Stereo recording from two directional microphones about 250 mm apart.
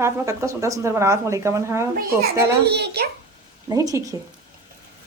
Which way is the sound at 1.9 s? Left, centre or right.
Right.